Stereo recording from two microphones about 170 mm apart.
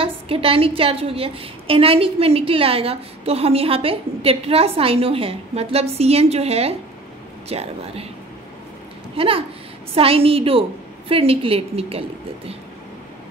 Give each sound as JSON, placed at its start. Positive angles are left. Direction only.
{"t": 0.0, "sound": "a woman's voice", "side_deg": -35}
{"t": 9.1, "sound": "a woman's voice", "side_deg": -35}